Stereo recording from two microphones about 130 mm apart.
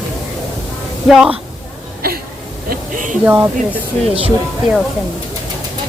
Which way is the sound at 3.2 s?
15° right (ahead or behind).